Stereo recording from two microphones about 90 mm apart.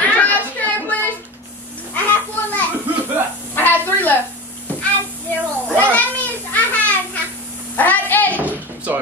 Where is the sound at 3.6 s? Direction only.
20° left (ahead or behind).